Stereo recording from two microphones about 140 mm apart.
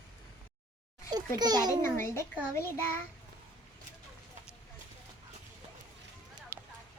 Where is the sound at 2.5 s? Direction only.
15° left (ahead or behind).